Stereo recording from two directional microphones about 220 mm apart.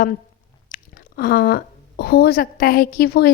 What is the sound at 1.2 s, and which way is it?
Speech, 45° left (ahead or behind).